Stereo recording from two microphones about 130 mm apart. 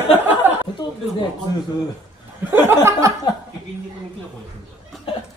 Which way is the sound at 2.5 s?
20° right (ahead or behind).